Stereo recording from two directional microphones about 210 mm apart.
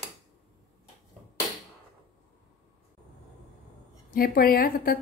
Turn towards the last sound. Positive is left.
turn(degrees=45)  # may be behind; listen again after turning